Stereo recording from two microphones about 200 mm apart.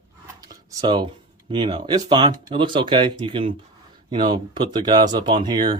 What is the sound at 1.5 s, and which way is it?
Speech, 20° right (ahead or behind).